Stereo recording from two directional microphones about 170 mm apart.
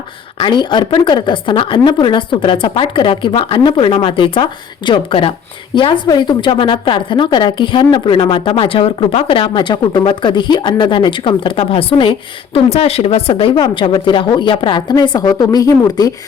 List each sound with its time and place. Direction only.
0.3 s a woman's voice: 25° left (ahead or behind)